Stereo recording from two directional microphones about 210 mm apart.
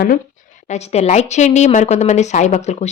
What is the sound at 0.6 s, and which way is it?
Speech, 30° left (ahead or behind).